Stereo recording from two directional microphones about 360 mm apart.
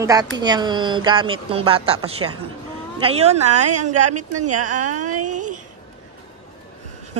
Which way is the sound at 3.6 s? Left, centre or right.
Right.